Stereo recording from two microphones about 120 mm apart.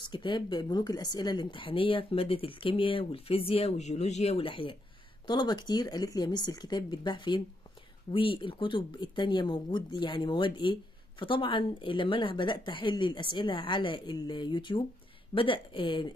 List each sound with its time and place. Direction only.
0.0 s speech: 40° left (ahead or behind)